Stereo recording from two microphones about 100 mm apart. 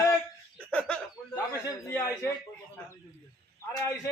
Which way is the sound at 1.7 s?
30° left (ahead or behind).